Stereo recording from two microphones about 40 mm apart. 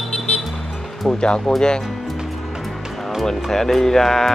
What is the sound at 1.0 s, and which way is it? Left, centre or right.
Speech, left.